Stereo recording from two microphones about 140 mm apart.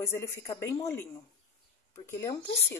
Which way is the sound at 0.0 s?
20° left (ahead or behind).